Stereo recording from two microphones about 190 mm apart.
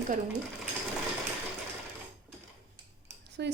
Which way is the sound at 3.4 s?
60° right (ahead or behind).